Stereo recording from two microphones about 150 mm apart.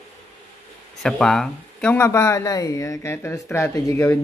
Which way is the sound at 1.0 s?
Centre (ahead or behind).